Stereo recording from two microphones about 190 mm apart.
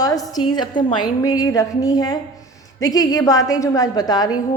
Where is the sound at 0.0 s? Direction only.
20° left (ahead or behind).